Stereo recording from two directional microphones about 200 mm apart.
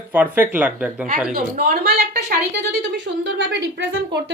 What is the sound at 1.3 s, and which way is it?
A woman's voice, 50° right (ahead or behind).